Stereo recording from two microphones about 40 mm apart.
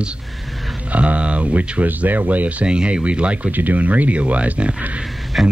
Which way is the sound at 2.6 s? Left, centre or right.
Right.